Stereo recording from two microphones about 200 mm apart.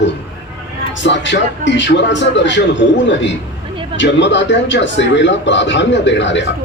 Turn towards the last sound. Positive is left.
turn(degrees=65)  # may be behind; listen again after turning